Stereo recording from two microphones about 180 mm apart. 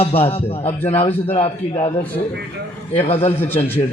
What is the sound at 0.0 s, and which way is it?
A man's voice, 35° left (ahead or behind).